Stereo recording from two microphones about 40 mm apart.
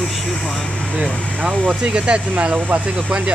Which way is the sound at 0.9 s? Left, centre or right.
Right.